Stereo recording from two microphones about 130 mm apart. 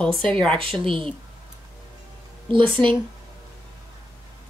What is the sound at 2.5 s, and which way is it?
Speech, 40° right (ahead or behind).